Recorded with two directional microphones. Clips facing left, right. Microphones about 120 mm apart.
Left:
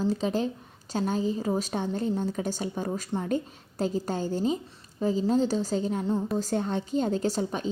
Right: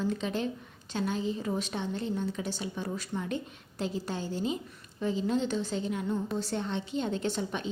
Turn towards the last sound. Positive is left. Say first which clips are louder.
# left 4 dB
turn(degrees=40)  # may be behind; listen again after turning